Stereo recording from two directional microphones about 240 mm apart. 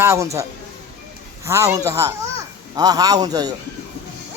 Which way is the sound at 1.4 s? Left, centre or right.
Centre.